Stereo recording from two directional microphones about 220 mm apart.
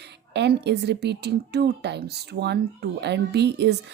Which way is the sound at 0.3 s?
50° right (ahead or behind).